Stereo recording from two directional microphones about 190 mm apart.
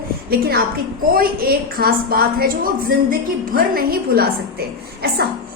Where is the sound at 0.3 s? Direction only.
55° right (ahead or behind).